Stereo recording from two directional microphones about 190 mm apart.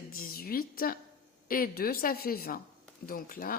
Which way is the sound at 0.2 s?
50° left (ahead or behind).